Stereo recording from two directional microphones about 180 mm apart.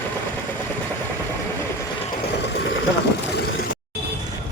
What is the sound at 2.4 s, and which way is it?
Vehicle, 75° left (ahead or behind).